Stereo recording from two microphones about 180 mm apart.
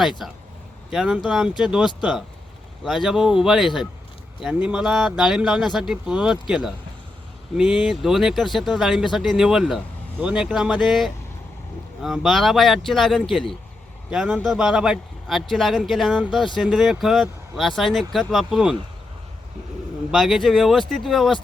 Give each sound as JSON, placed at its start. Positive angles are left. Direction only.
{"t": 0.2, "sound": "speech", "side_deg": 0}
{"t": 20.1, "sound": "speech", "side_deg": 0}